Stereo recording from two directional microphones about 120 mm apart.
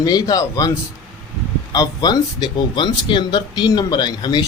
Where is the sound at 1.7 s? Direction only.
35° left (ahead or behind).